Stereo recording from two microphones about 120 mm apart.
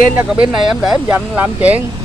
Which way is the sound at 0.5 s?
Centre (ahead or behind).